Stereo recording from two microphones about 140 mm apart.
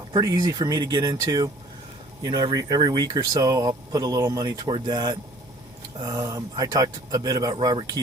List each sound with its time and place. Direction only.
0.1 s speech: 30° right (ahead or behind)